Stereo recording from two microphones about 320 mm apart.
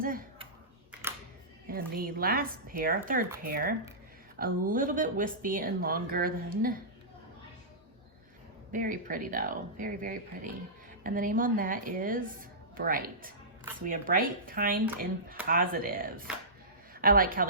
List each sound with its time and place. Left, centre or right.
0.0 s a sound: right
1.7 s speech: right
8.7 s a woman's voice: right